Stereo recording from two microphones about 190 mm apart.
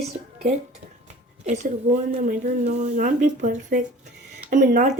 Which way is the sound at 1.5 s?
40° right (ahead or behind).